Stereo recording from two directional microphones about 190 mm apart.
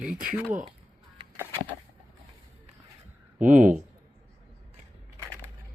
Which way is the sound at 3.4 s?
45° right (ahead or behind).